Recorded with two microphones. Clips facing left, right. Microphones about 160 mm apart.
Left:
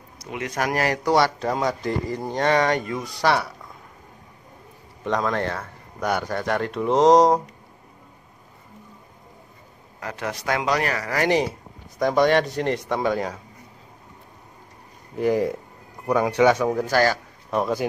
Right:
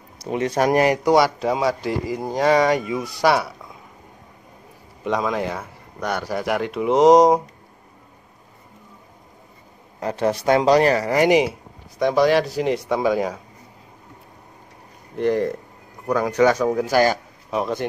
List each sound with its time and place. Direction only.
0.2 s a man's voice: 30° right (ahead or behind); by 3.5 s 10° right (ahead or behind)
5.0 s a man's voice: 5° right (ahead or behind)
5.9 s speech: centre (ahead or behind)
6.3 s a man's voice: 10° right (ahead or behind)
9.9 s speech: 30° right (ahead or behind); by 11.5 s 10° right (ahead or behind)
12.0 s speech: centre (ahead or behind)
15.1 s speech: 5° left (ahead or behind)
16.8 s a man's voice: 15° right (ahead or behind)
17.5 s speech: centre (ahead or behind)